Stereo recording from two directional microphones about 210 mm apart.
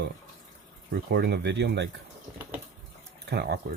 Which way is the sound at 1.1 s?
50° right (ahead or behind).